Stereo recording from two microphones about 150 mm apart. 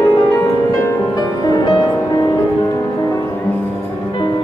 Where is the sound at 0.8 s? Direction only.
25° left (ahead or behind).